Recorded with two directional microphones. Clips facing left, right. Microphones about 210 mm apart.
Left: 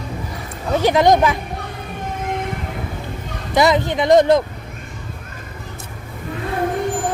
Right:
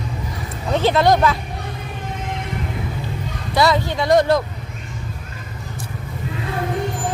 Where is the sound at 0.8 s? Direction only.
15° left (ahead or behind).